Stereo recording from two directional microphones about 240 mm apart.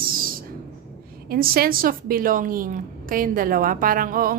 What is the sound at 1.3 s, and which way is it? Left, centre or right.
A woman's voice, right.